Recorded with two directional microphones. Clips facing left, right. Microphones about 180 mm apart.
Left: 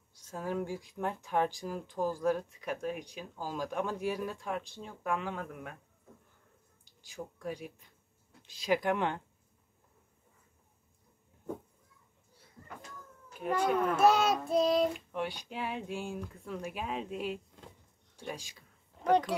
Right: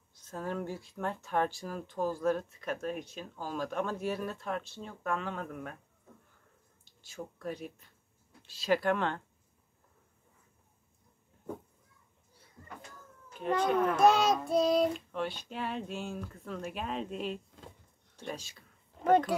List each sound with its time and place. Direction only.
0.1 s speech: 10° left (ahead or behind)
6.8 s a sound: 15° left (ahead or behind)
8.4 s speech: 15° left (ahead or behind)
13.4 s speech: 10° left (ahead or behind)
13.9 s child singing: 5° left (ahead or behind)
15.0 s speech: 15° left (ahead or behind)
19.0 s child singing: 5° right (ahead or behind)